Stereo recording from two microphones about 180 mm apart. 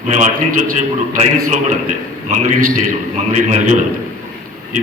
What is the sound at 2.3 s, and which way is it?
A man's voice, 45° right (ahead or behind).